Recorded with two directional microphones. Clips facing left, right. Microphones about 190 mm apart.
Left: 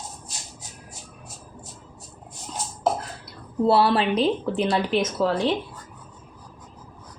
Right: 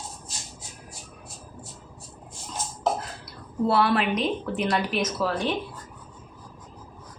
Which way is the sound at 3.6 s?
30° left (ahead or behind).